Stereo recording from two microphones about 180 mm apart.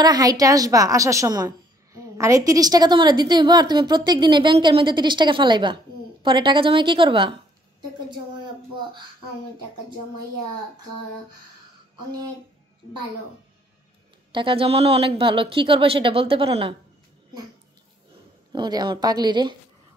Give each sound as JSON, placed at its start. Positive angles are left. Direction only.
{"t": 0.0, "sound": "a woman's voice", "side_deg": -20}
{"t": 14.3, "sound": "speech", "side_deg": -30}
{"t": 18.5, "sound": "a woman's voice", "side_deg": -25}